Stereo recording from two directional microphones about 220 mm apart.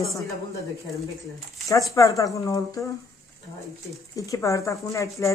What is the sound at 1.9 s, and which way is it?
Speech, 15° left (ahead or behind).